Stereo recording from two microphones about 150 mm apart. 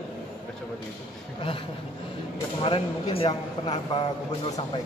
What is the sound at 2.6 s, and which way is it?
Speech, 40° left (ahead or behind).